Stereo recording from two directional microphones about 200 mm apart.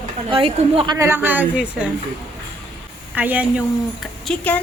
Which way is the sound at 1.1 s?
10° right (ahead or behind).